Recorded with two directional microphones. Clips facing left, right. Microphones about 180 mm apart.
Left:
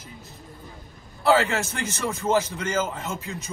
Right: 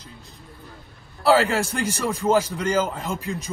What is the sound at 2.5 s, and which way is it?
Speech, 35° right (ahead or behind).